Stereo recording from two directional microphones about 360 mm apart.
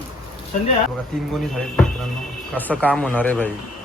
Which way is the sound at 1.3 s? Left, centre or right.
Centre.